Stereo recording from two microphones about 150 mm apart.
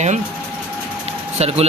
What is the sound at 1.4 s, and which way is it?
Speech, 45° right (ahead or behind).